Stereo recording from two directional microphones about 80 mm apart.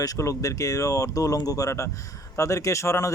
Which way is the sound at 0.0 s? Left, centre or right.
Left.